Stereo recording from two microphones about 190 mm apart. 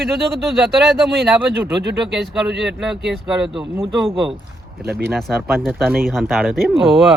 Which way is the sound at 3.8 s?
25° right (ahead or behind).